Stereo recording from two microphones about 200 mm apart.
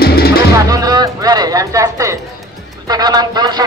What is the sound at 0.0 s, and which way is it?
Music, 50° left (ahead or behind).